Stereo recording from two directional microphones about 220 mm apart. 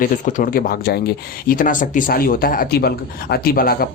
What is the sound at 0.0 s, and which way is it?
Speech, 40° left (ahead or behind).